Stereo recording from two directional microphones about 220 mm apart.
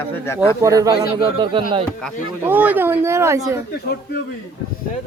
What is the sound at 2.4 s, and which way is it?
Speech, 5° right (ahead or behind).